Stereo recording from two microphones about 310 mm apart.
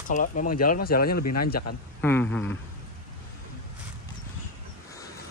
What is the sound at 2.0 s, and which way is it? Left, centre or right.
Speech, centre.